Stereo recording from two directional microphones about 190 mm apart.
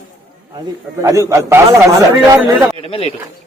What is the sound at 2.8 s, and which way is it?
Speech, 30° left (ahead or behind).